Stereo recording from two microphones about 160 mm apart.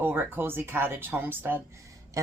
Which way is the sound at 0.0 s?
15° right (ahead or behind).